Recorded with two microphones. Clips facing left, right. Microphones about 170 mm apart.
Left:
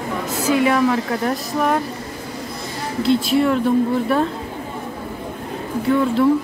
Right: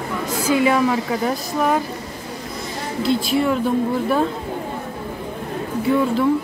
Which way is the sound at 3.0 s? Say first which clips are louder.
Left 3 dB; centre (ahead or behind).